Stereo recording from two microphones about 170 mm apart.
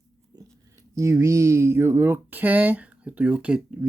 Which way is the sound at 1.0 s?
15° right (ahead or behind).